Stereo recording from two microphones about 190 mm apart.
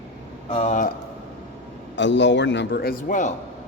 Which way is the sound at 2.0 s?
70° left (ahead or behind).